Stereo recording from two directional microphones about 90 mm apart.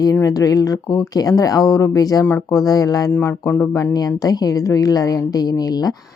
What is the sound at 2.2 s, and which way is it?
Speech, 25° left (ahead or behind).